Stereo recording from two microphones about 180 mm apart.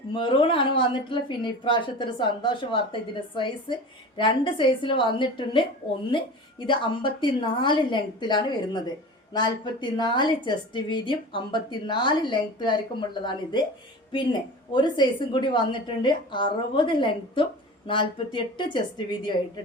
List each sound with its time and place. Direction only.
0.1 s a woman's voice: 30° left (ahead or behind)
14.7 s a woman's voice: 25° left (ahead or behind)